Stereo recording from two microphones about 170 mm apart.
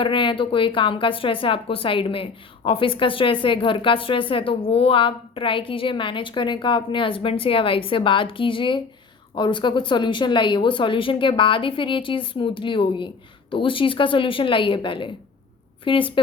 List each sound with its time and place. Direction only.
0.0 s a woman's voice: 30° left (ahead or behind)